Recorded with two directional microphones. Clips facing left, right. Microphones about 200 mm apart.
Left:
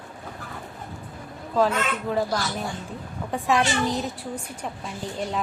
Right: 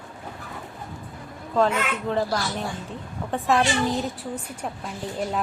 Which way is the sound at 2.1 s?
5° left (ahead or behind).